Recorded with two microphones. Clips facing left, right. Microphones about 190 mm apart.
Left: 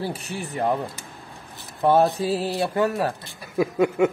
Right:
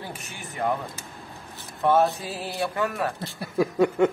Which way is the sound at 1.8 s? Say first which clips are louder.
Left 3 dB; 35° left (ahead or behind).